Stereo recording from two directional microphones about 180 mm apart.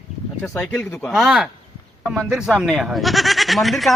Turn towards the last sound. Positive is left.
turn(degrees=0)  # may be behind; listen again after turning